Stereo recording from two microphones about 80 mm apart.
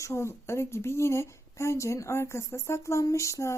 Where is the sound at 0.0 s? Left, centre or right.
Left.